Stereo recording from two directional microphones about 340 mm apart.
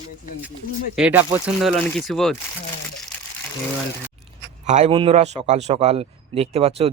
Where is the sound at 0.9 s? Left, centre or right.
Centre.